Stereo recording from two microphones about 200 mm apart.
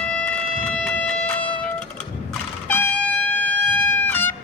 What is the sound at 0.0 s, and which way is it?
Music, 5° left (ahead or behind).